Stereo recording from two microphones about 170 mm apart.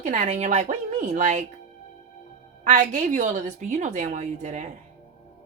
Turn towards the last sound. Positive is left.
turn(degrees=-45)  # may be behind; listen again after turning